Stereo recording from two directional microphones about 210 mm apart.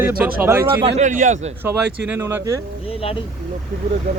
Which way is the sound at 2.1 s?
10° right (ahead or behind).